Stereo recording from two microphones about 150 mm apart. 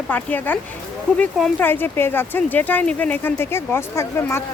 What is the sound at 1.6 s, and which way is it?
Speech, 15° left (ahead or behind).